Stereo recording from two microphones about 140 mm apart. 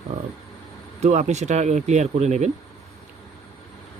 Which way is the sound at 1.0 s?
55° right (ahead or behind).